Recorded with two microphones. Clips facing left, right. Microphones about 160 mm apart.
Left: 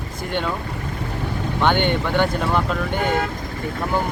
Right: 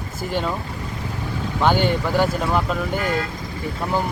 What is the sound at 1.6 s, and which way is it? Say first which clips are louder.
Speech: even; 5° right (ahead or behind).